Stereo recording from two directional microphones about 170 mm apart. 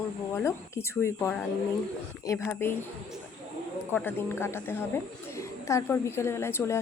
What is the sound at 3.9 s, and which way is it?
A woman's voice, 10° left (ahead or behind).